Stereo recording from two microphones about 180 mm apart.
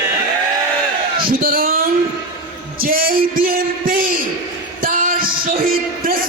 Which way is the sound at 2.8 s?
55° right (ahead or behind).